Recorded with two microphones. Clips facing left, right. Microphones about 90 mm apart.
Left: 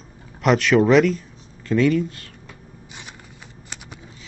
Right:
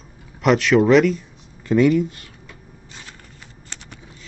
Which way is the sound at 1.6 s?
10° right (ahead or behind).